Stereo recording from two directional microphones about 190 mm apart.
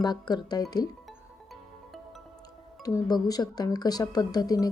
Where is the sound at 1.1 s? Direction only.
Centre (ahead or behind).